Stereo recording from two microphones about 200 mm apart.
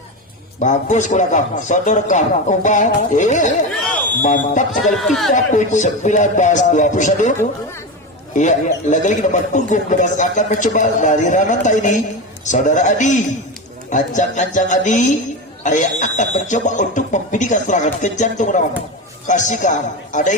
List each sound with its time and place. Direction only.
0.6 s speech: 35° left (ahead or behind)
4.9 s speech: centre (ahead or behind)
5.3 s speech: 40° left (ahead or behind)
8.4 s speech: 40° left (ahead or behind)